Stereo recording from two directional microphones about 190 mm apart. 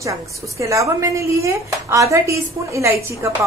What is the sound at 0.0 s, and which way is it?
A woman's voice, 15° right (ahead or behind).